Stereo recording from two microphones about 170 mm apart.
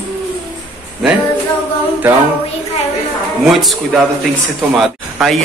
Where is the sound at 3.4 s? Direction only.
Centre (ahead or behind).